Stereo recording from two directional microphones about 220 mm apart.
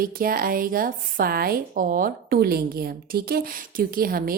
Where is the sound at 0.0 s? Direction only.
40° right (ahead or behind).